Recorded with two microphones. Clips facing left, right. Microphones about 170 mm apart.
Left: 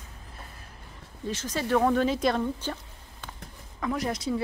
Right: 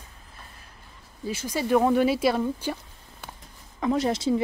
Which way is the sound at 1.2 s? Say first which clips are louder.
Right 2 dB; 10° right (ahead or behind).